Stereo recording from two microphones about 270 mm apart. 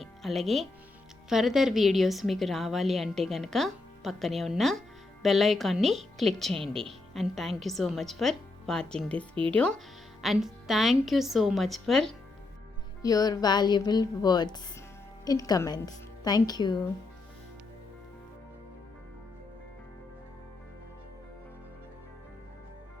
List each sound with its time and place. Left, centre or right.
0.0 s a woman's voice: centre
13.0 s speech: centre